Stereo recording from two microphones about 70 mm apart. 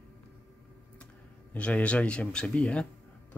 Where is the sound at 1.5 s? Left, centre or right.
Centre.